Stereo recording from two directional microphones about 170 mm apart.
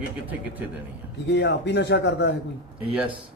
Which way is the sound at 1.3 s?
90° left.